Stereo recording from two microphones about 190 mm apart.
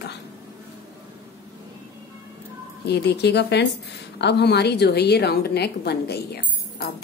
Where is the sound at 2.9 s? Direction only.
60° left (ahead or behind).